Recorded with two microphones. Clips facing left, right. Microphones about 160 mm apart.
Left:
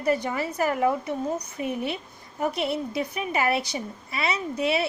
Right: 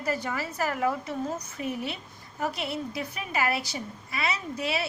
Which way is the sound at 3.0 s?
20° left (ahead or behind).